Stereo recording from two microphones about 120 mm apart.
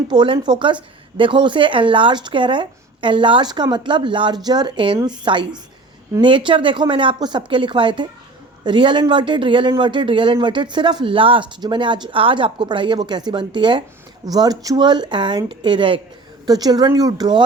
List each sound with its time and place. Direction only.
0.1 s a woman's voice: 40° right (ahead or behind)